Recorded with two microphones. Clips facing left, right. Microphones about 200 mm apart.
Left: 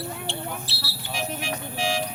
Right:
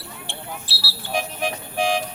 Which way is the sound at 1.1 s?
55° right (ahead or behind).